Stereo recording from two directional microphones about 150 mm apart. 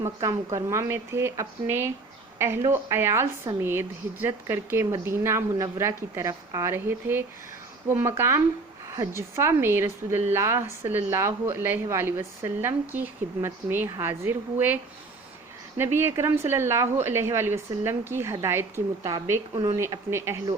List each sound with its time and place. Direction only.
0.0 s a woman's voice: 20° right (ahead or behind)
15.8 s a woman's voice: 15° right (ahead or behind)